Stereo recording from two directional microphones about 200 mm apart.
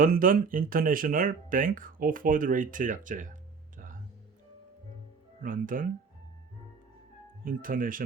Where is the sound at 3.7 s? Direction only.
40° right (ahead or behind).